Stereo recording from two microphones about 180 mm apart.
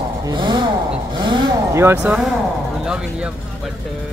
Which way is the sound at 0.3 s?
25° right (ahead or behind).